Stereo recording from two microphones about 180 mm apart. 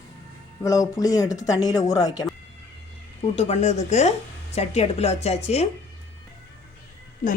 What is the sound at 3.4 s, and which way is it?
Speech, 35° left (ahead or behind).